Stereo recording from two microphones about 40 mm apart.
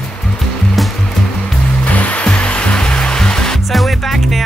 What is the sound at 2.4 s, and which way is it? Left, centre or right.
Music, left.